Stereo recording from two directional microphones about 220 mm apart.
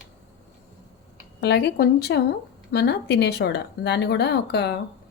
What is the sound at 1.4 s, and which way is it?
Speech, 50° left (ahead or behind).